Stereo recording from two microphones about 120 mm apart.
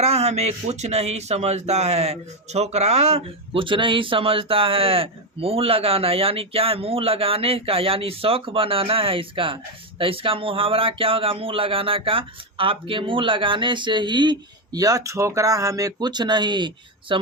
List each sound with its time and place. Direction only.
0.0 s speech: 60° right (ahead or behind); by 17.2 s 40° right (ahead or behind)